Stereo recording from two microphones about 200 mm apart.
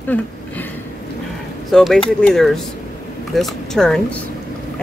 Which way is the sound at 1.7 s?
Centre (ahead or behind).